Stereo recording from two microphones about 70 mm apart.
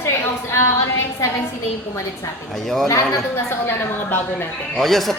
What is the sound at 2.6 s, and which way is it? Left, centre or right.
Speech, centre.